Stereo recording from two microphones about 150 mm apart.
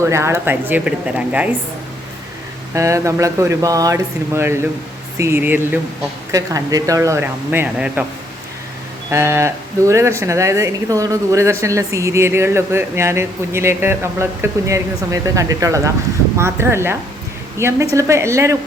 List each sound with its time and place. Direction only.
0.0 s speech: 20° right (ahead or behind)
2.7 s speech: 20° right (ahead or behind)
6.3 s speech: 25° right (ahead or behind)
9.0 s speech: 20° right (ahead or behind)